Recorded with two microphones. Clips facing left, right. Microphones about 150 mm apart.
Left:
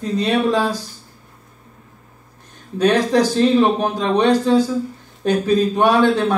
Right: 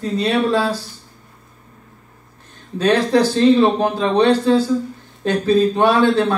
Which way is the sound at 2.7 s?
15° left (ahead or behind).